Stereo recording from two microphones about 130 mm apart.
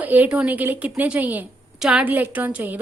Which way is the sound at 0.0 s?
15° right (ahead or behind).